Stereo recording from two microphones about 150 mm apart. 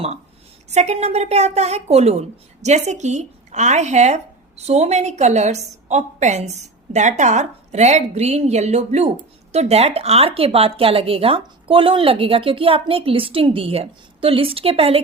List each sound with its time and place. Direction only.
0.7 s a woman's voice: 50° right (ahead or behind)